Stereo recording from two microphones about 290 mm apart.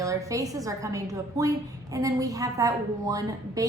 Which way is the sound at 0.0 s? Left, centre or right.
Centre.